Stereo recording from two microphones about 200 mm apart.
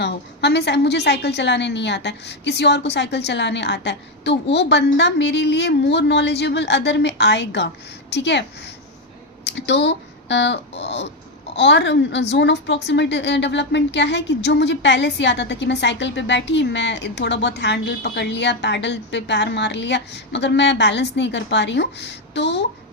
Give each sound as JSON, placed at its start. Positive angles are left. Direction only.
{"t": 0.0, "sound": "a woman's voice", "side_deg": 55}